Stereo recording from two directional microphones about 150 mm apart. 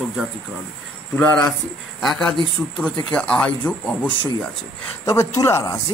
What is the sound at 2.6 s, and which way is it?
Speech, 5° left (ahead or behind).